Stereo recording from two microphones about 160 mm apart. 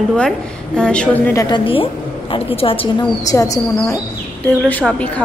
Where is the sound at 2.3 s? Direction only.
35° left (ahead or behind).